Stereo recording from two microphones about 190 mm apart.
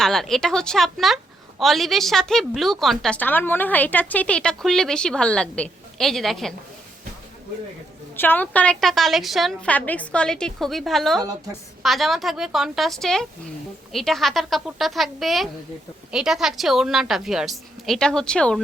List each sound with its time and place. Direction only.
0.0 s a woman's voice: centre (ahead or behind)
8.1 s a woman's voice: 10° left (ahead or behind)